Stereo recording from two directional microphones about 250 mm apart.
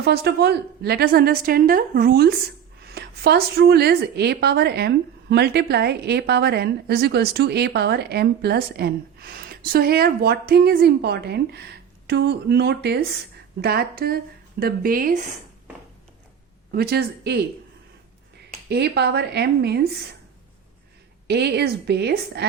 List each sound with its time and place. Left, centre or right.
0.0 s a woman's voice: right
16.7 s a woman's voice: right
18.7 s a woman's voice: right
21.2 s a woman's voice: right